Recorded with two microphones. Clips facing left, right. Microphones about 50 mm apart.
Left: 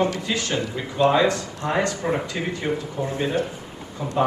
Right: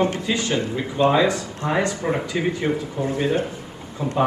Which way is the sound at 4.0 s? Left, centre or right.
Right.